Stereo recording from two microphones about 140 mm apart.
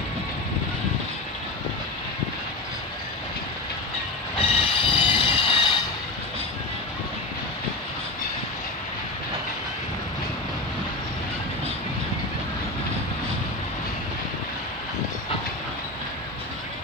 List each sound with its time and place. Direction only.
4.4 s train: 40° left (ahead or behind)